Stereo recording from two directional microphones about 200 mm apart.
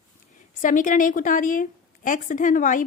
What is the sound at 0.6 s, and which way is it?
Speech, 40° left (ahead or behind).